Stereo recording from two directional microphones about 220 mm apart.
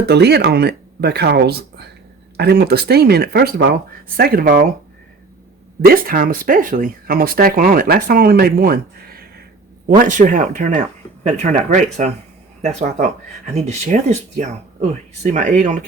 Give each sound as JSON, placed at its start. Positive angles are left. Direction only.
{"t": 0.0, "sound": "speech", "side_deg": -50}
{"t": 5.8, "sound": "speech", "side_deg": -40}